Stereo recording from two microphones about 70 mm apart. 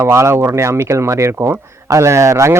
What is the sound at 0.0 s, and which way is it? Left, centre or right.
Speech, right.